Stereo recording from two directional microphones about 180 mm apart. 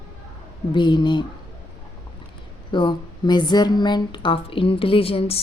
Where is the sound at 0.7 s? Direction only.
25° left (ahead or behind).